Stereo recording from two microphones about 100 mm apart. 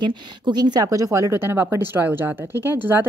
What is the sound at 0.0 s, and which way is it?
Speech, 50° right (ahead or behind).